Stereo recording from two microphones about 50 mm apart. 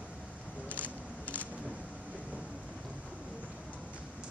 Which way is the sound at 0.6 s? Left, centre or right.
Left.